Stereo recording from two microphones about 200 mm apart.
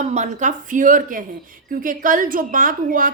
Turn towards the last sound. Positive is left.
turn(degrees=-45)  # may be behind; listen again after turning